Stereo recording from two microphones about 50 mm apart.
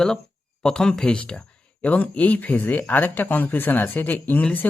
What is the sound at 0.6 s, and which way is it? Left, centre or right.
Speech, centre.